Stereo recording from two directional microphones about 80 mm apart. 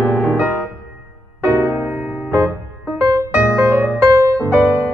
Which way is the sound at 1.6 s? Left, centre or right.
Right.